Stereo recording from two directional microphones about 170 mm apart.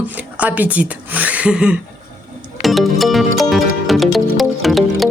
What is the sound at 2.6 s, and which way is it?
Music, centre (ahead or behind).